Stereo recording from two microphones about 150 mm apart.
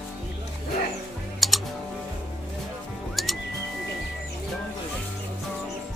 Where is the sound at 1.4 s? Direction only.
Centre (ahead or behind).